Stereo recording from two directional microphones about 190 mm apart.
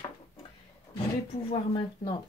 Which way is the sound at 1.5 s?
25° left (ahead or behind).